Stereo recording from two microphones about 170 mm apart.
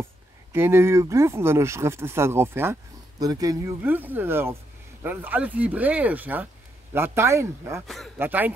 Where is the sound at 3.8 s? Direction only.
10° right (ahead or behind).